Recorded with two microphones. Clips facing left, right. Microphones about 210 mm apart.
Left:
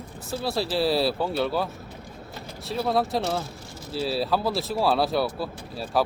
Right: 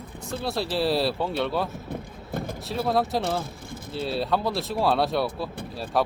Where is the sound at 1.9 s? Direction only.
50° right (ahead or behind).